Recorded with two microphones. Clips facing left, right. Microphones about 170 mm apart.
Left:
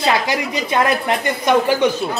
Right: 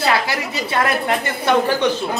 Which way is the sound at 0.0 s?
15° left (ahead or behind).